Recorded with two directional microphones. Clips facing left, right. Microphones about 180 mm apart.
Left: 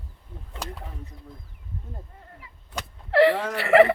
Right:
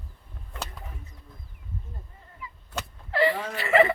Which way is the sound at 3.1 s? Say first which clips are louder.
Left 6 dB; 70° left (ahead or behind).